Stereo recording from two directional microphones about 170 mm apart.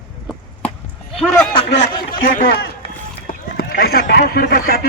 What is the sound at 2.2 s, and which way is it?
Speech, 55° left (ahead or behind).